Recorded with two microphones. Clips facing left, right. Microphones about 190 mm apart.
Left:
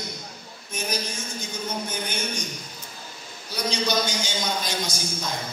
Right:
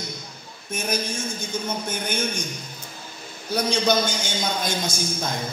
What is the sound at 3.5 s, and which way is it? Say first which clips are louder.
A man's voice: right 4 dB; 55° right (ahead or behind).